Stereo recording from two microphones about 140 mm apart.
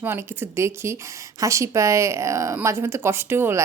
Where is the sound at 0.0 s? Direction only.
15° right (ahead or behind).